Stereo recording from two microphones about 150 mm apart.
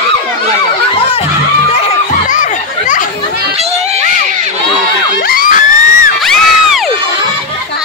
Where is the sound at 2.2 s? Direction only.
60° left (ahead or behind).